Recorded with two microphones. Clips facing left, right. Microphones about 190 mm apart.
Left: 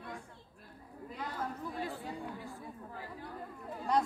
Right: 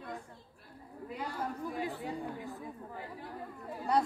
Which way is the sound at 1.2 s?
15° right (ahead or behind).